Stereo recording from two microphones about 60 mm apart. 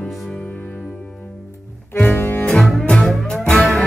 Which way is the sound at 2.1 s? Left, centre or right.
Left.